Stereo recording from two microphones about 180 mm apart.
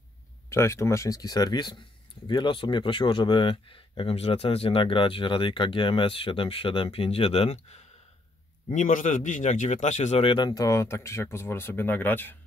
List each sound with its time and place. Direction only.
0.5 s speech: 15° left (ahead or behind)